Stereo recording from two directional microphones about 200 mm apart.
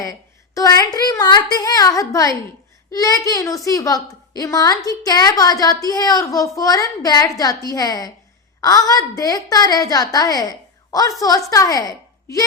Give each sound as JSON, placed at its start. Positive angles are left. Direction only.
{"t": 0.0, "sound": "a woman's voice", "side_deg": 15}